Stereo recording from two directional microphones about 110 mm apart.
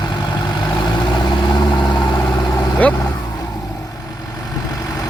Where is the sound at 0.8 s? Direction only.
40° left (ahead or behind).